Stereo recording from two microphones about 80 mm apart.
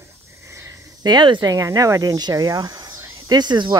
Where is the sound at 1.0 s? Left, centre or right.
Right.